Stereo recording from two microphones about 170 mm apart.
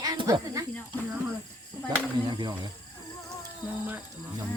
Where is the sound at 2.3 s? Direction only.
25° right (ahead or behind).